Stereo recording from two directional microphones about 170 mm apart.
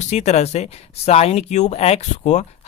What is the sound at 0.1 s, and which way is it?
Speech, 40° left (ahead or behind).